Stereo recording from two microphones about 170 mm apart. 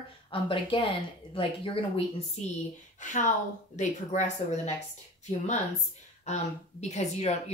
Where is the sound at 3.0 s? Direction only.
45° left (ahead or behind).